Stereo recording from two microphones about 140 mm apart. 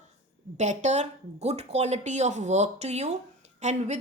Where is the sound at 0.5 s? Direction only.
55° right (ahead or behind).